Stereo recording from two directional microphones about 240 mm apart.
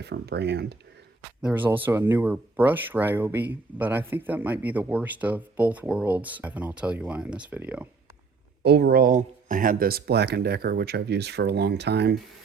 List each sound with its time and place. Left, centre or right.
0.0 s speech: right
1.4 s speech: centre
8.6 s speech: right